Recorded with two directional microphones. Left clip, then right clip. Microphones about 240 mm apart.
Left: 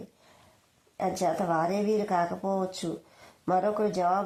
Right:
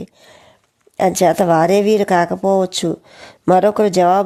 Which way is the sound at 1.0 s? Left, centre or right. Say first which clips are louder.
Right 15 dB; right.